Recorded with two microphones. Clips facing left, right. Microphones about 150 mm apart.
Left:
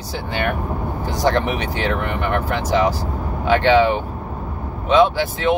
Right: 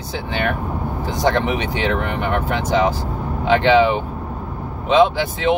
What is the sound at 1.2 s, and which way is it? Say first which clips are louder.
Speech: even; 20° right (ahead or behind).